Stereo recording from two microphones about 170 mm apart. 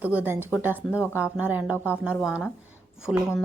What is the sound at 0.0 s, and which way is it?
A woman's voice, 10° right (ahead or behind).